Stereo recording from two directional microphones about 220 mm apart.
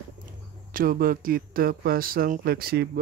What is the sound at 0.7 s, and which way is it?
A man's voice, 40° right (ahead or behind).